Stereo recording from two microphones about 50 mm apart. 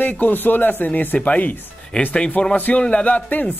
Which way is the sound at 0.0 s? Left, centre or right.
Left.